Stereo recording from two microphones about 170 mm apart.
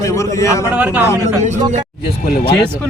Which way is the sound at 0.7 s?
10° right (ahead or behind).